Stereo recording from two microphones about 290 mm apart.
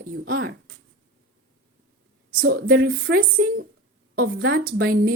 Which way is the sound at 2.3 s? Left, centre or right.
Right.